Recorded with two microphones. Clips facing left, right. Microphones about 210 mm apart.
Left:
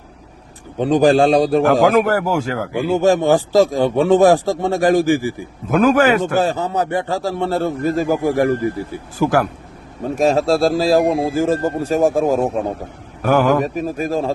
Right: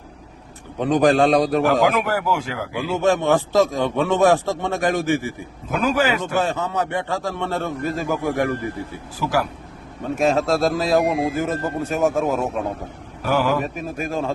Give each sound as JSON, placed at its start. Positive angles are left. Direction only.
{"t": 0.8, "sound": "speech", "side_deg": 30}
{"t": 1.6, "sound": "speech", "side_deg": 45}
{"t": 5.7, "sound": "a man's voice", "side_deg": 50}
{"t": 6.3, "sound": "speech", "side_deg": 35}
{"t": 9.1, "sound": "a man's voice", "side_deg": 50}
{"t": 10.2, "sound": "speech", "side_deg": 35}
{"t": 13.2, "sound": "a man's voice", "side_deg": 50}
{"t": 13.6, "sound": "speech", "side_deg": 35}